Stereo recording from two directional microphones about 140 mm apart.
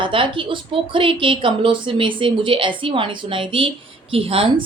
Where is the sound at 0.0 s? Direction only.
35° right (ahead or behind).